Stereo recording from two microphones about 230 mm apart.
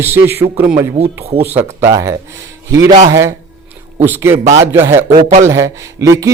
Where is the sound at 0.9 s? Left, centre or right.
Right.